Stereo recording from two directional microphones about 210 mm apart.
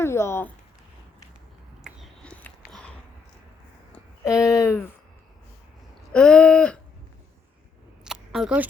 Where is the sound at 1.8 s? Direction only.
Centre (ahead or behind).